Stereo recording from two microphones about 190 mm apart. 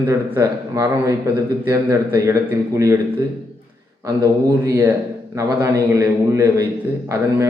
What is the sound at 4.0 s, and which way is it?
Speech, 15° right (ahead or behind).